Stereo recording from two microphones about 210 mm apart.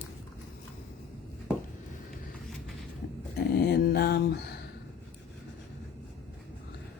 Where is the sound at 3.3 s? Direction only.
50° left (ahead or behind).